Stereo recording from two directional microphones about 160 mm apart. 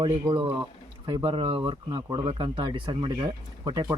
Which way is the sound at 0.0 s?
25° right (ahead or behind).